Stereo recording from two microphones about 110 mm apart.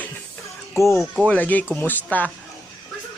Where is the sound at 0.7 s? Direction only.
25° left (ahead or behind).